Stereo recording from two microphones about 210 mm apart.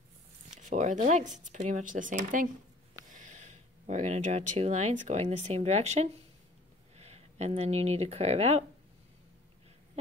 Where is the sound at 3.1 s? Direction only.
35° right (ahead or behind).